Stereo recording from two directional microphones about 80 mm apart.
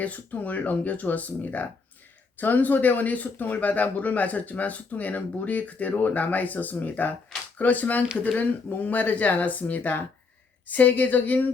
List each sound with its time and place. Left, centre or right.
0.0 s speech: centre